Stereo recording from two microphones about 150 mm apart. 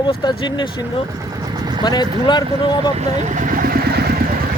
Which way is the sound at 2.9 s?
45° right (ahead or behind).